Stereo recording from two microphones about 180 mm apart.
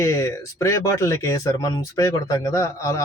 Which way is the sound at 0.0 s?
15° left (ahead or behind).